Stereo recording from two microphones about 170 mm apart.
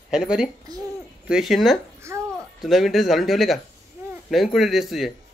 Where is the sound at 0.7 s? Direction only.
25° right (ahead or behind).